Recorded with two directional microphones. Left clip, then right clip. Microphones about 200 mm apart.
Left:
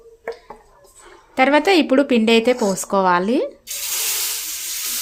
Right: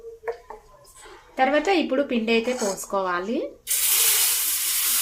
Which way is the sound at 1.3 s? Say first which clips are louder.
Left 6 dB; 60° left (ahead or behind).